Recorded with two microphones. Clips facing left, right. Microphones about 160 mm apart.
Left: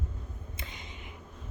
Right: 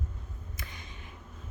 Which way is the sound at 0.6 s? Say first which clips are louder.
Left 1 dB; 20° left (ahead or behind).